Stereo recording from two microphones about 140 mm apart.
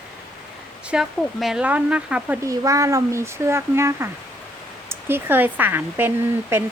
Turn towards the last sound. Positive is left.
turn(degrees=-15)  # may be behind; listen again after turning